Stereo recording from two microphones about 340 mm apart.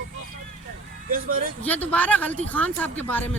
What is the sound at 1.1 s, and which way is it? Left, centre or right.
Speech, right.